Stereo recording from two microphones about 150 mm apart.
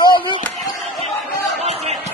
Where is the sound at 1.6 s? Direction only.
45° right (ahead or behind).